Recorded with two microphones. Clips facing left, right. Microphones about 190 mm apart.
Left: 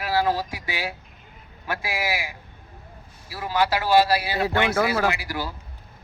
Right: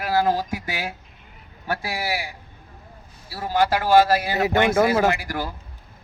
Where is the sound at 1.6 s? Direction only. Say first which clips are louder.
Right 1 dB; 35° right (ahead or behind).